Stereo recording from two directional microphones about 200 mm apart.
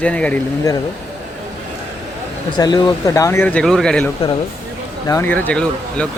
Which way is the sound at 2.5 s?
20° left (ahead or behind).